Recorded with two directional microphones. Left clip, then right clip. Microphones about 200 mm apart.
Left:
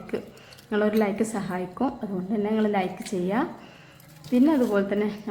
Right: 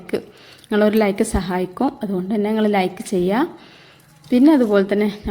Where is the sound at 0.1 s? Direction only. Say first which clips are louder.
Right 8 dB; 20° right (ahead or behind).